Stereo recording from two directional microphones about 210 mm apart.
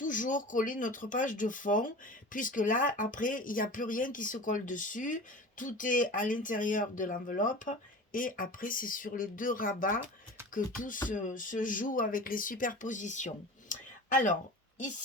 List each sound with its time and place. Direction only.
0.0 s speech: 40° left (ahead or behind)